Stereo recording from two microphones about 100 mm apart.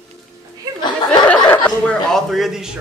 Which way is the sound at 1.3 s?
15° left (ahead or behind).